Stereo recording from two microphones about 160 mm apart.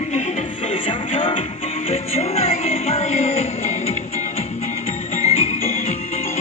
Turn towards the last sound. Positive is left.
turn(degrees=40)  # may be behind; listen again after turning